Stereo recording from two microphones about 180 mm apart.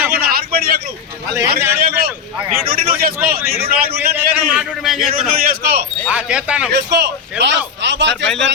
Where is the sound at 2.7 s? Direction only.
55° right (ahead or behind).